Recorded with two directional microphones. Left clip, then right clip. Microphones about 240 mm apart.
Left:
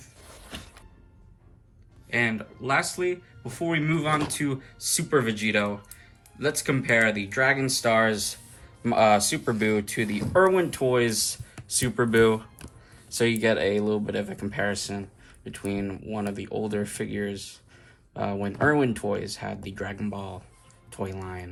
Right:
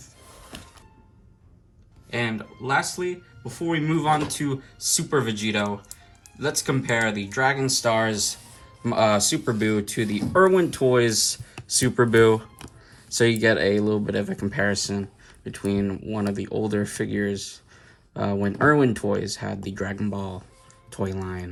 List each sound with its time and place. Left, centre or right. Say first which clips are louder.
2.0 s speech: left 2 dB; centre